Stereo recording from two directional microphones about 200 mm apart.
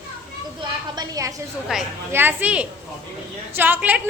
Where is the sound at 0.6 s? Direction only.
20° right (ahead or behind).